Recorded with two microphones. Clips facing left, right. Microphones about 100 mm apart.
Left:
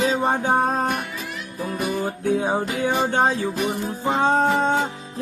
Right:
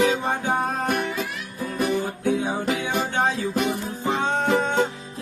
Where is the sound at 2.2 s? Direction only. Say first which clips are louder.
Left 2 dB; 35° left (ahead or behind).